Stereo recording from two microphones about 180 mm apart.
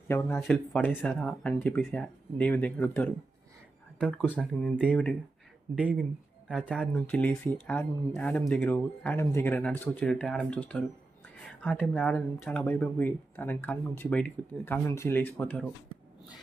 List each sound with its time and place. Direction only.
0.1 s speech: 15° left (ahead or behind)
0.3 s speech: 5° left (ahead or behind)
5.8 s speech: 5° right (ahead or behind)
6.5 s speech: 5° left (ahead or behind)